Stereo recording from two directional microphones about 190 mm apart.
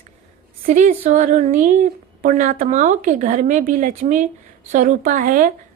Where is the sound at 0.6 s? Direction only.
45° right (ahead or behind).